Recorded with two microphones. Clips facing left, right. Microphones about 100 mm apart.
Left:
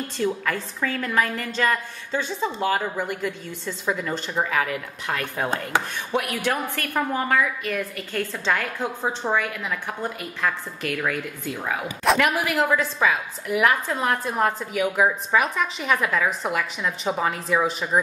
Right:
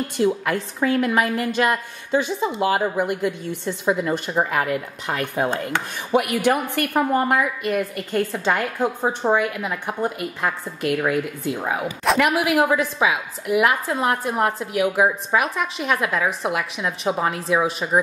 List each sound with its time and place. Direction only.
0.2 s a woman's voice: 15° right (ahead or behind)